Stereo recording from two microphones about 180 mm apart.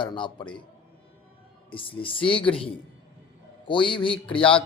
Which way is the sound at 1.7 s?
30° left (ahead or behind).